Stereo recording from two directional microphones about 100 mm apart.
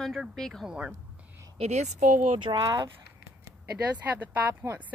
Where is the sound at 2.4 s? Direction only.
50° right (ahead or behind).